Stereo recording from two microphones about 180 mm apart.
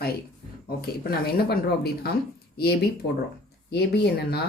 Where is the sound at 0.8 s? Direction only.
60° left (ahead or behind).